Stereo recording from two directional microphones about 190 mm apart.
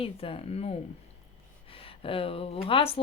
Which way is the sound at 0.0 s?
30° left (ahead or behind).